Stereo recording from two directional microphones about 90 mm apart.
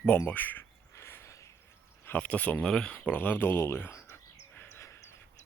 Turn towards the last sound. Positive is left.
turn(degrees=30)  # may be behind; listen again after turning